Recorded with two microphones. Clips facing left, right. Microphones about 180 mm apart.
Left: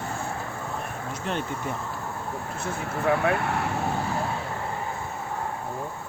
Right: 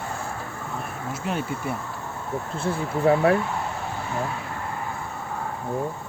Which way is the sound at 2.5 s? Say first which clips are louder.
Right 7 dB; 30° right (ahead or behind).